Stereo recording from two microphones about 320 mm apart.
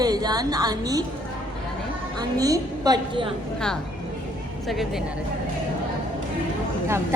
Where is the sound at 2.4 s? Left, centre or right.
Centre.